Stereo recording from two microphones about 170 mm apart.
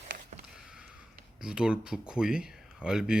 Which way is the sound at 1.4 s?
5° right (ahead or behind).